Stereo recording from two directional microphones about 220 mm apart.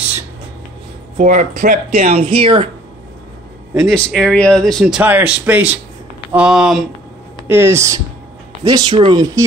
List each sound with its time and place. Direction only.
1.1 s speech: 35° right (ahead or behind)
3.7 s speech: centre (ahead or behind); by 9.4 s 20° right (ahead or behind)